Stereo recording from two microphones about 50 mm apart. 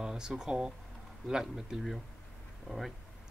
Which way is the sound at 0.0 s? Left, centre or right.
Centre.